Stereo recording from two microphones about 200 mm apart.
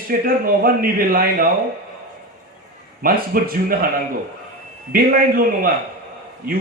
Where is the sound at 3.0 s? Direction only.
45° right (ahead or behind).